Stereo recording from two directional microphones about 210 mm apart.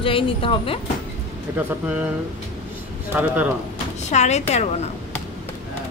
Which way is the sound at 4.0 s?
35° left (ahead or behind).